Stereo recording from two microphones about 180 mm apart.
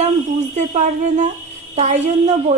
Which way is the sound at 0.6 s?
40° right (ahead or behind).